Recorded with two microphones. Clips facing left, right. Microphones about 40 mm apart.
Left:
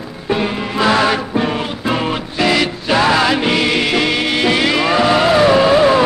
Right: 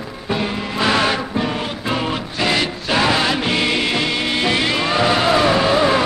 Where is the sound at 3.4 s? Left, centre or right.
Centre.